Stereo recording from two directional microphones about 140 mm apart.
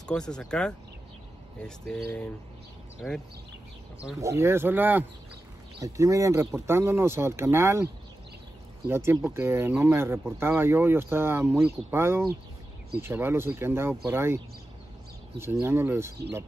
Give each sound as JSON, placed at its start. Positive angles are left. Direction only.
{"t": 0.0, "sound": "speech", "side_deg": 5}
{"t": 4.2, "sound": "speech", "side_deg": -20}
{"t": 15.6, "sound": "speech", "side_deg": -15}